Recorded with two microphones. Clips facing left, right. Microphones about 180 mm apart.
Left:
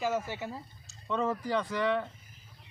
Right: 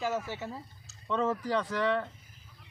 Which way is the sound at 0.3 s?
15° left (ahead or behind).